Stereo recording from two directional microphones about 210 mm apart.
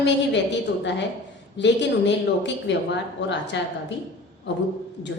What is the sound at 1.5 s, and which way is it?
Speech, 55° left (ahead or behind).